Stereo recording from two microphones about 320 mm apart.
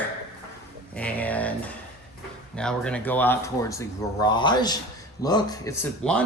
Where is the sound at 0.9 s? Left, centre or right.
Centre.